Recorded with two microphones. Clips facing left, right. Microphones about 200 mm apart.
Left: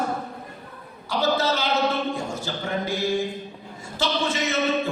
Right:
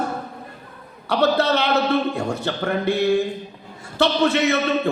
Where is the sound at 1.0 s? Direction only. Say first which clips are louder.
Right 5 dB; 60° right (ahead or behind).